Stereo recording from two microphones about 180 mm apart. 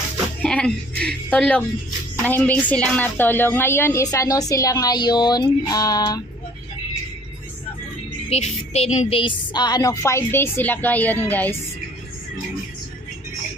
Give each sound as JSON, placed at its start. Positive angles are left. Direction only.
{"t": 0.4, "sound": "a woman's voice", "side_deg": 5}
{"t": 8.3, "sound": "a woman's voice", "side_deg": 35}